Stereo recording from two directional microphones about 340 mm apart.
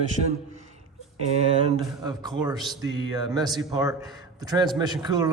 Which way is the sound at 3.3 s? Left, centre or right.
Centre.